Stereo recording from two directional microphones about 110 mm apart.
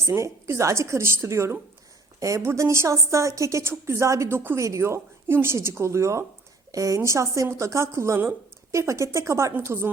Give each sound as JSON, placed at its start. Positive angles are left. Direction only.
{"t": 0.0, "sound": "a woman's voice", "side_deg": -25}